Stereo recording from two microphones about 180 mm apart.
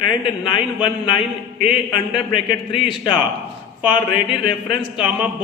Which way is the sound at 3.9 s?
30° left (ahead or behind).